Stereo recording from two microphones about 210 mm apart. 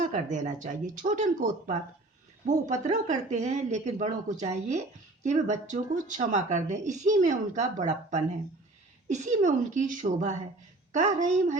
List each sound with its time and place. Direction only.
0.1 s speech: 35° right (ahead or behind)